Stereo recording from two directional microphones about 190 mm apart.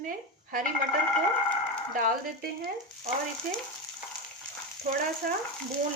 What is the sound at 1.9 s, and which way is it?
A woman's voice, 45° right (ahead or behind).